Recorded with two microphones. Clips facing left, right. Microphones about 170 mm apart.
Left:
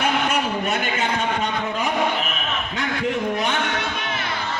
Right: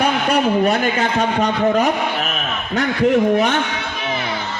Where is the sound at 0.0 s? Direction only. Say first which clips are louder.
Right 5 dB; 35° right (ahead or behind).